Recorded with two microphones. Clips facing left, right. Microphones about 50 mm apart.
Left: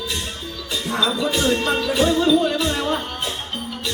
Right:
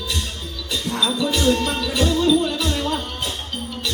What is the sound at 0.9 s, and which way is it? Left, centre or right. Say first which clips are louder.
Music: left 1 dB; left.